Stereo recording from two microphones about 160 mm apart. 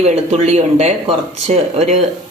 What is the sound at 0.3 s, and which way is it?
Speech, 40° right (ahead or behind).